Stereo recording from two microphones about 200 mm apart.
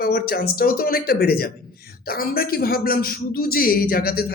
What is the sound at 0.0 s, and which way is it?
A man's voice, 50° left (ahead or behind).